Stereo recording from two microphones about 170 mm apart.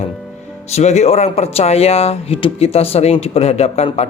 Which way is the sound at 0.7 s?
40° left (ahead or behind).